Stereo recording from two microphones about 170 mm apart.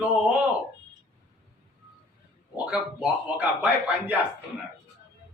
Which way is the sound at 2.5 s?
5° right (ahead or behind).